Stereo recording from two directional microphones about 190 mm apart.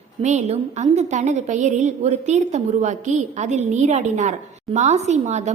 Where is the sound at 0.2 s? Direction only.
35° right (ahead or behind).